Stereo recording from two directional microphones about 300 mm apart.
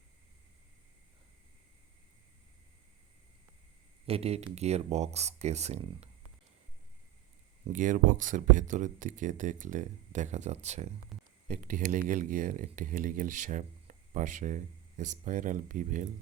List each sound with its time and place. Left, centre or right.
4.0 s speech: centre
7.7 s speech: right